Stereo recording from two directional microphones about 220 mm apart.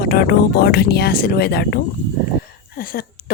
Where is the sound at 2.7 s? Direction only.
45° left (ahead or behind).